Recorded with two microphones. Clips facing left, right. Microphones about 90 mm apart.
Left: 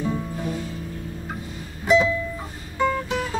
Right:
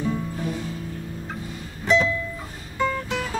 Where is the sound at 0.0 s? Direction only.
10° left (ahead or behind).